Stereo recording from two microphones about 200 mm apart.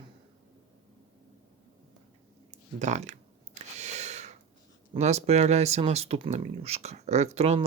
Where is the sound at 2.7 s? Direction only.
35° right (ahead or behind).